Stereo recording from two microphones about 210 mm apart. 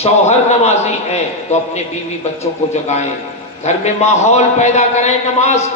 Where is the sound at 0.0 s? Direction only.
30° left (ahead or behind).